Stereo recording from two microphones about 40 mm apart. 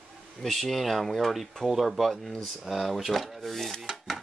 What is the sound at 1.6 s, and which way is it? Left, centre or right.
Speech, centre.